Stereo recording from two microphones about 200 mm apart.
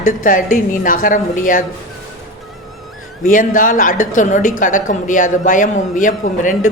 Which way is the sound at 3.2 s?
40° left (ahead or behind).